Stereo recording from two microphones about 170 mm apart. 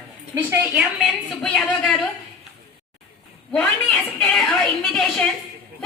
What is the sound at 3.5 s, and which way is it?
A woman's voice, 5° left (ahead or behind).